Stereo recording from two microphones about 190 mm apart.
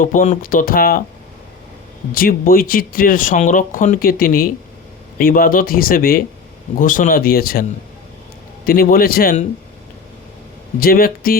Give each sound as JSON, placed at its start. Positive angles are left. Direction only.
{"t": 0.0, "sound": "speech", "side_deg": 45}
{"t": 2.1, "sound": "speech", "side_deg": 50}
{"t": 8.6, "sound": "speech", "side_deg": 50}
{"t": 10.8, "sound": "speech", "side_deg": 50}